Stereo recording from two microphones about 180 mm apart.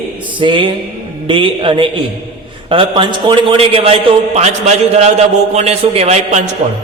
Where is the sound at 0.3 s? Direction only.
25° right (ahead or behind).